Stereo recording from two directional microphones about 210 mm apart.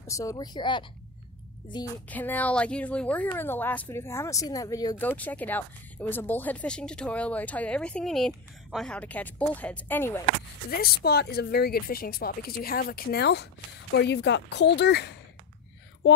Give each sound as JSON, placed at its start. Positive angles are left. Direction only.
{"t": 0.0, "sound": "a woman's voice", "side_deg": 15}
{"t": 2.0, "sound": "speech", "side_deg": 10}
{"t": 10.7, "sound": "speech", "side_deg": 50}